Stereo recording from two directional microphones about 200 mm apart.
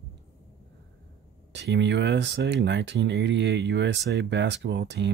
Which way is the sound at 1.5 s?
60° right (ahead or behind).